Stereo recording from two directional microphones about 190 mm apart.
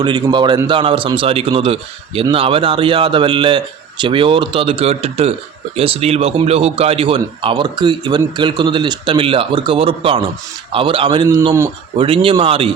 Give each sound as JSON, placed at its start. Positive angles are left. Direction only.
{"t": 0.0, "sound": "a man's voice", "side_deg": -25}